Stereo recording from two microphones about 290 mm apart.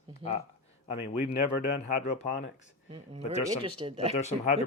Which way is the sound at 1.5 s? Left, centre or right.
Left.